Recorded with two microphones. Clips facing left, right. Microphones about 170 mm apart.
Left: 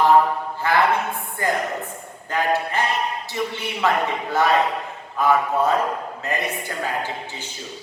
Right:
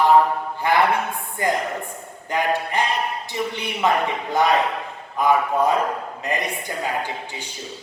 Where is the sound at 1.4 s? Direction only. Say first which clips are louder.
Right 1 dB; 20° right (ahead or behind).